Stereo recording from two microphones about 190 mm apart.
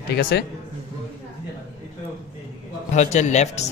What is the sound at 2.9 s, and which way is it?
Speech, 40° left (ahead or behind).